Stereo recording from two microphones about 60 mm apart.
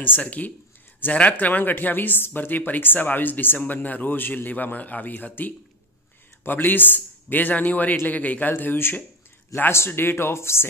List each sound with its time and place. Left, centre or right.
0.0 s speech: left